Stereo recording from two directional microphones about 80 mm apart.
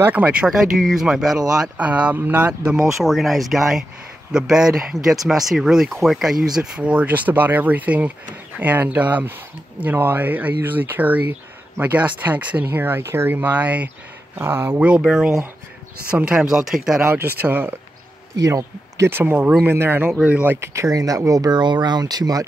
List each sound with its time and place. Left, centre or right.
0.0 s speech: centre
1.9 s speech: centre
14.4 s speech: right
14.8 s speech: centre
17.0 s speech: right
18.4 s a man's voice: right
19.0 s speech: right
20.6 s speech: right